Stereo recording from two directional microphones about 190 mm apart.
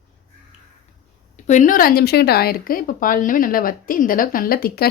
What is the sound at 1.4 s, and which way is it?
Speech, 40° left (ahead or behind).